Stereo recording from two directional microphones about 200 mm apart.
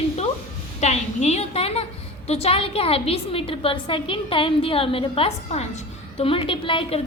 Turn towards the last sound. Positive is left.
turn(degrees=25)  # may be behind; listen again after turning